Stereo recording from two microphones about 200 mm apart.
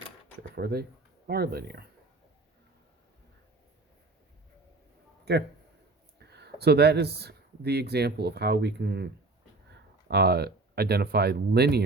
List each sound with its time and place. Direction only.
0.5 s speech: 50° right (ahead or behind)
5.3 s a man's voice: 55° right (ahead or behind)
10.1 s speech: 55° right (ahead or behind)